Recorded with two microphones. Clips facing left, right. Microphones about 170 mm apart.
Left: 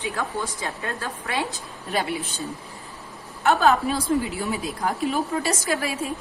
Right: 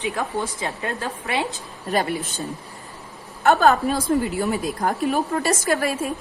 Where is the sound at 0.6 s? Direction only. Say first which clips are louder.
Right 3 dB; 20° right (ahead or behind).